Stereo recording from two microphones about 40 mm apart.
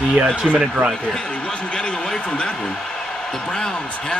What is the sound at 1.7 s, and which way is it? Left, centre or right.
A man's voice, left.